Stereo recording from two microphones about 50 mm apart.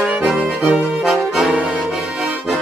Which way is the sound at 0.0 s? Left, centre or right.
Right.